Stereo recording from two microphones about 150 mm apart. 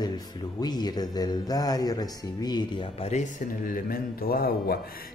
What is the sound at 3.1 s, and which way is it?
Speech, 55° left (ahead or behind).